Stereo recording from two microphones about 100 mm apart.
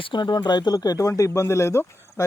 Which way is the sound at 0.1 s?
50° left (ahead or behind).